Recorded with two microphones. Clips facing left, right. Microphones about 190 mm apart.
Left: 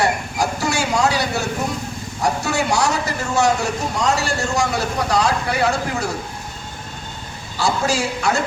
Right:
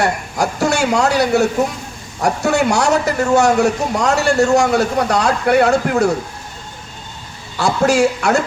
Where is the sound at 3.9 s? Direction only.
65° right (ahead or behind).